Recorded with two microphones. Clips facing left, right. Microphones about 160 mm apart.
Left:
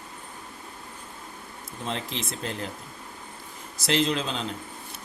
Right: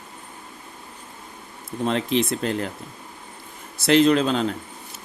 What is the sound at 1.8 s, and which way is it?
Speech, 65° right (ahead or behind).